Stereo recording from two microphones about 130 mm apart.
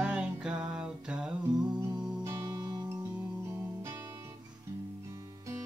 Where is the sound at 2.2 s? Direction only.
25° right (ahead or behind).